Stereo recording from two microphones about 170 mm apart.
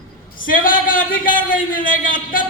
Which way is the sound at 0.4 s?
55° left (ahead or behind).